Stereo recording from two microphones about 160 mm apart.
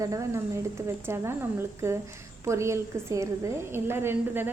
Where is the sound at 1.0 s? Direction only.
15° right (ahead or behind).